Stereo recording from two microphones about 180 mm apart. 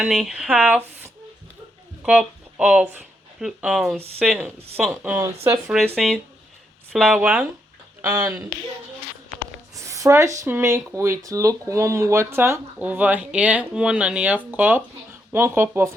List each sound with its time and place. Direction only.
0.0 s speech: centre (ahead or behind)
9.7 s speech: 20° right (ahead or behind)